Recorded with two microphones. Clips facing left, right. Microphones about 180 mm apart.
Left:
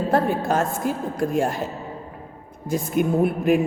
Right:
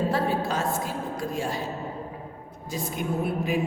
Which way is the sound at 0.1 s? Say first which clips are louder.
Left 5 dB; 50° left (ahead or behind).